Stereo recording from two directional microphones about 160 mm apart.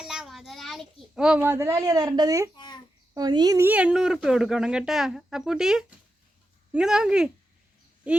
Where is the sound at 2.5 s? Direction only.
30° left (ahead or behind).